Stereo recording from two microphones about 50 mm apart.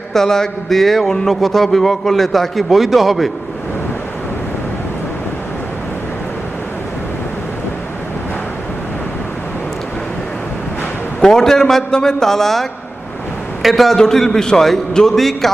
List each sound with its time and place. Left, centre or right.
0.1 s a man's voice: centre
11.2 s a man's voice: centre